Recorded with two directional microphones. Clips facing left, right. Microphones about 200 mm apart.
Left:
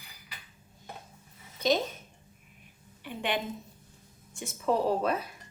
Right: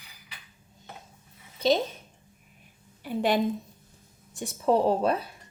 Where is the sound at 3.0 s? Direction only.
40° right (ahead or behind).